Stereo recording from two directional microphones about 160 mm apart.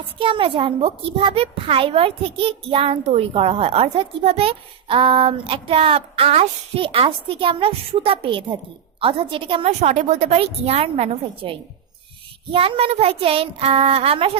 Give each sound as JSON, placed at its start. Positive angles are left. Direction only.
{"t": 0.2, "sound": "a child's voice", "side_deg": -35}